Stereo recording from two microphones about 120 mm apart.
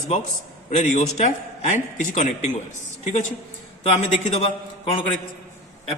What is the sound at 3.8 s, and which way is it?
Speech, 60° left (ahead or behind).